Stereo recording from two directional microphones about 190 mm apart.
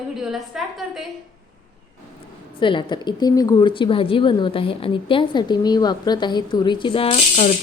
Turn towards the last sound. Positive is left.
turn(degrees=35)  # may be behind; listen again after turning